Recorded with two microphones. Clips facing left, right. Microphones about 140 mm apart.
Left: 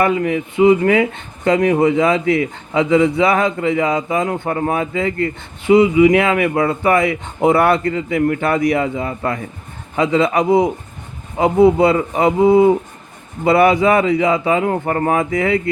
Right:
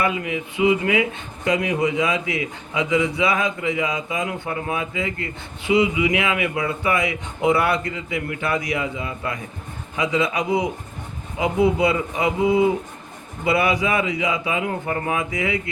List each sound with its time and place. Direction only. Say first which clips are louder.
0.0 s a man's voice: left 7 dB; 50° left (ahead or behind)